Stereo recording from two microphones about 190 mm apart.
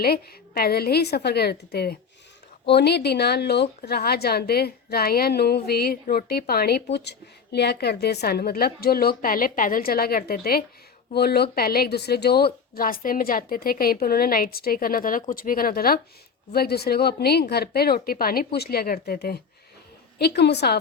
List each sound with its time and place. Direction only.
0.0 s a woman's voice: 55° left (ahead or behind)